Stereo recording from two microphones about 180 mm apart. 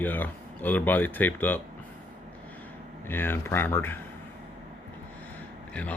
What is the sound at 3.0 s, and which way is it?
Speech, 10° left (ahead or behind).